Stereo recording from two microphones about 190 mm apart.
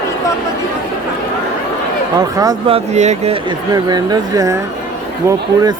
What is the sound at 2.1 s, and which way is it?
Speech, 20° right (ahead or behind).